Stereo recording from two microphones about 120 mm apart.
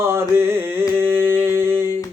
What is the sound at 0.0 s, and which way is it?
Mantra, 20° right (ahead or behind).